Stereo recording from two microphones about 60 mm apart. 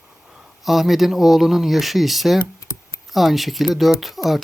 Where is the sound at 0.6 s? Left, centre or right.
Centre.